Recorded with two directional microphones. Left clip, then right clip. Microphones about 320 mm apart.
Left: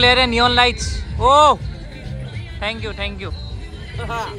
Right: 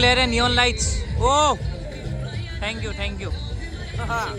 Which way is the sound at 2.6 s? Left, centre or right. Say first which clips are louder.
Left 4 dB; centre.